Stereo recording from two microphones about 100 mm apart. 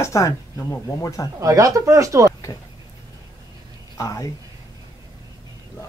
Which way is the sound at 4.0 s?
35° left (ahead or behind).